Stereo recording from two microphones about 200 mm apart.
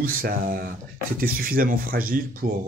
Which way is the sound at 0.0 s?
45° right (ahead or behind).